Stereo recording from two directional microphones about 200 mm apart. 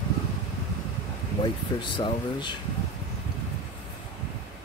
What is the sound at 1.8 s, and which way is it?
Speech, 25° left (ahead or behind).